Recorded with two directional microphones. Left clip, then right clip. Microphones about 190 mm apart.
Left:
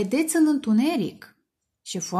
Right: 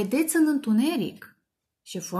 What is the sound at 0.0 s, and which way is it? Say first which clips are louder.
Speech: left 2 dB; 20° left (ahead or behind).